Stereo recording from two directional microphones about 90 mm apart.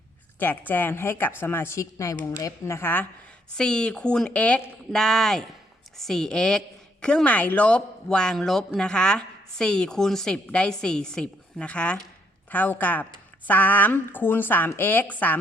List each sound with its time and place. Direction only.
0.3 s speech: 20° left (ahead or behind)
3.6 s speech: 10° left (ahead or behind)